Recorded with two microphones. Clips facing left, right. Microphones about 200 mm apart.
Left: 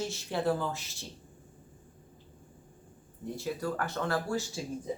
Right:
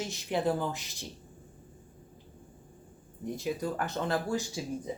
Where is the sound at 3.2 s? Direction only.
15° right (ahead or behind).